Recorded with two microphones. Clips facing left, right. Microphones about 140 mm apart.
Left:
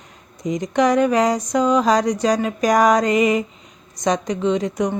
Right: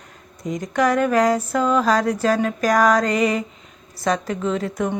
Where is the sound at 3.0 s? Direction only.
5° left (ahead or behind).